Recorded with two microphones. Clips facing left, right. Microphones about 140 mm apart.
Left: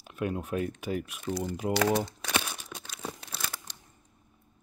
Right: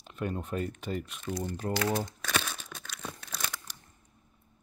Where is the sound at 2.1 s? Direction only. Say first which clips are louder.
Left 1 dB; 15° left (ahead or behind).